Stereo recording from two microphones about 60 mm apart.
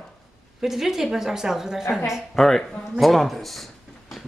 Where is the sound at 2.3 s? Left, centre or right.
Centre.